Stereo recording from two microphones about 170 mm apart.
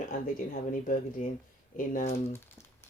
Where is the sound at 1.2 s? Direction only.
45° left (ahead or behind).